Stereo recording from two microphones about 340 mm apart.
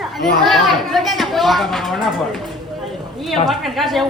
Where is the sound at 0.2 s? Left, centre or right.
Centre.